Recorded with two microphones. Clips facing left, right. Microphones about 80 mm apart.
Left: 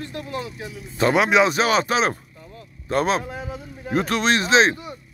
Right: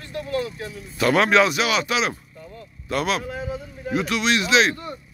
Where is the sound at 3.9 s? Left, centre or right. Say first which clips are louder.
Left 2 dB; left.